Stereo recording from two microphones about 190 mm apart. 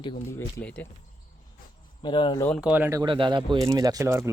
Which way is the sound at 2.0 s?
25° left (ahead or behind).